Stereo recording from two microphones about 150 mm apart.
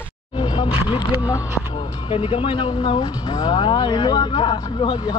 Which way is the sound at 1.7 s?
35° left (ahead or behind).